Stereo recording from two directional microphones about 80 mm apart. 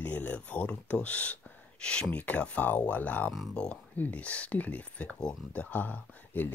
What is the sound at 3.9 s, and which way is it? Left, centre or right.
Speech, centre.